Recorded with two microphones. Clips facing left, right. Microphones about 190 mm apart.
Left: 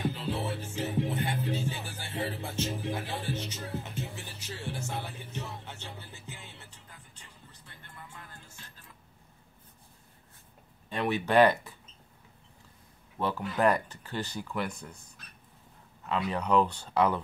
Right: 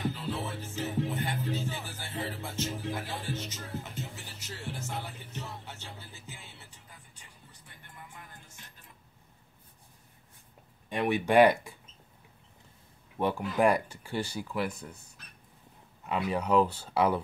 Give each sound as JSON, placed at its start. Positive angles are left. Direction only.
{"t": 0.1, "sound": "music", "side_deg": 15}
{"t": 6.7, "sound": "music", "side_deg": -10}
{"t": 10.9, "sound": "speech", "side_deg": -15}
{"t": 13.2, "sound": "speech", "side_deg": -15}
{"t": 16.1, "sound": "speech", "side_deg": -10}